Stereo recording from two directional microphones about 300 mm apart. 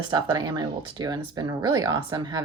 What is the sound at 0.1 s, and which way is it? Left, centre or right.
Speech, centre.